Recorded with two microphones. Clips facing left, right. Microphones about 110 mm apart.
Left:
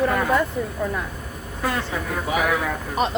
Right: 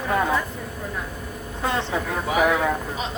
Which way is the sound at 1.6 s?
25° right (ahead or behind).